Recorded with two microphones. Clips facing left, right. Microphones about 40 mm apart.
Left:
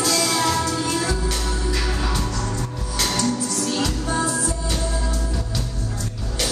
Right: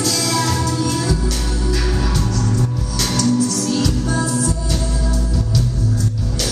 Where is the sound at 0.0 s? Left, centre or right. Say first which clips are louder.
Right 1 dB; centre.